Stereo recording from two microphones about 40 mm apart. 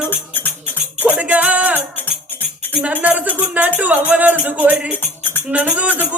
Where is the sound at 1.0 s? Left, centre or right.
Right.